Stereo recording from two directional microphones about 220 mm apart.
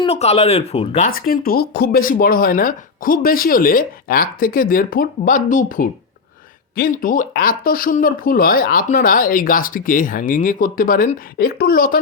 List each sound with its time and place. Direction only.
0.0 s speech: 30° left (ahead or behind)